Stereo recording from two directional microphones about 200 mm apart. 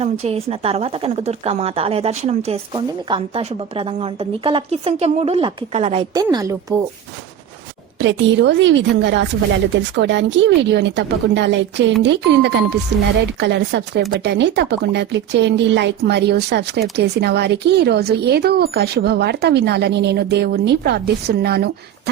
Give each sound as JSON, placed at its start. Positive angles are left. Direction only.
{"t": 0.0, "sound": "a woman's voice", "side_deg": -30}
{"t": 6.1, "sound": "a woman's voice", "side_deg": -15}
{"t": 7.9, "sound": "speech", "side_deg": -65}